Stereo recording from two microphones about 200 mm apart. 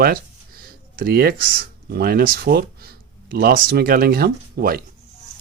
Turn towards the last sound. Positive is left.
turn(degrees=-50)  # may be behind; listen again after turning